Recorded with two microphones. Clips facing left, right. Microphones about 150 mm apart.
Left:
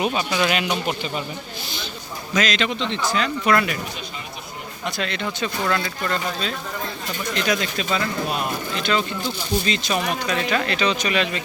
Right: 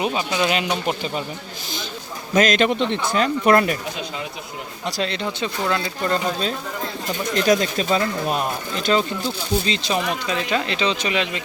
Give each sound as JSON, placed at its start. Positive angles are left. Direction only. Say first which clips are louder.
{"t": 0.0, "sound": "speech", "louder": "even", "side_deg": -20}
{"t": 2.4, "sound": "speech", "louder": "right 6 dB", "side_deg": -50}
{"t": 4.9, "sound": "speech", "louder": "right 2 dB", "side_deg": -30}